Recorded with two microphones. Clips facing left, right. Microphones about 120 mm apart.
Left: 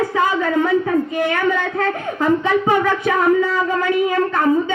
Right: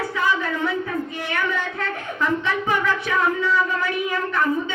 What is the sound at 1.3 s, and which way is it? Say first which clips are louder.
Speech: left 6 dB; 40° left (ahead or behind).